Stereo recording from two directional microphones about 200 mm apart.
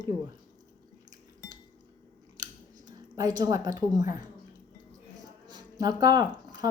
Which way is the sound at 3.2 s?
20° right (ahead or behind).